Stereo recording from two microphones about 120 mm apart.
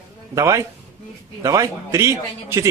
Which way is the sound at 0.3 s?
25° right (ahead or behind).